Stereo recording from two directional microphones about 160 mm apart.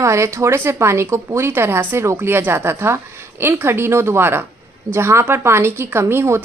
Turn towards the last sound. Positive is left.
turn(degrees=-15)  # may be behind; listen again after turning